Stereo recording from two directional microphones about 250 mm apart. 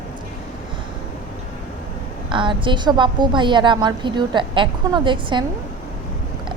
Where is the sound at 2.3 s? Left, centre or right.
Centre.